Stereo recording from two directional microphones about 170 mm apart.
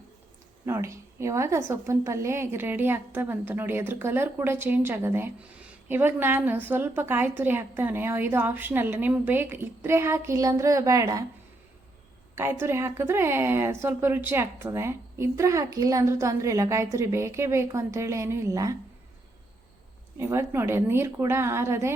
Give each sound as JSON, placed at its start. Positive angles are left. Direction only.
{"t": 0.6, "sound": "a woman's voice", "side_deg": -15}
{"t": 12.4, "sound": "a woman's voice", "side_deg": -15}
{"t": 20.1, "sound": "a woman's voice", "side_deg": -15}